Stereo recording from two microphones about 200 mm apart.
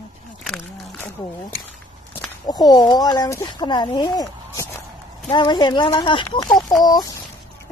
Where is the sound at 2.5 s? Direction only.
20° left (ahead or behind).